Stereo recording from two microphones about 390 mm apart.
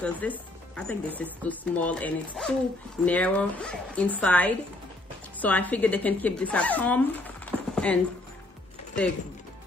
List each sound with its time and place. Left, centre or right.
0.0 s a woman's voice: centre